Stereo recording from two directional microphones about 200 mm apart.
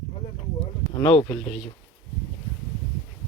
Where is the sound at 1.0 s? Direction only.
25° left (ahead or behind).